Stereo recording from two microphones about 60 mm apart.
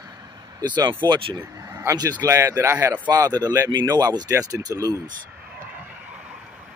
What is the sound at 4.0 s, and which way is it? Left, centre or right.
Speech, right.